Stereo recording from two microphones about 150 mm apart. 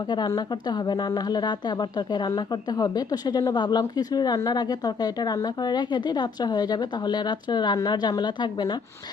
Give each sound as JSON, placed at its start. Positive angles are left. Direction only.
{"t": 0.1, "sound": "a woman's voice", "side_deg": 30}